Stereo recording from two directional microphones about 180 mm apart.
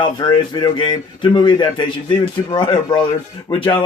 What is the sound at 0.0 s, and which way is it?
Speech, 25° left (ahead or behind).